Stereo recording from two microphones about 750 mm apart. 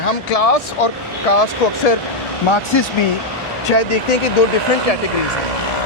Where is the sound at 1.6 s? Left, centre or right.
Left.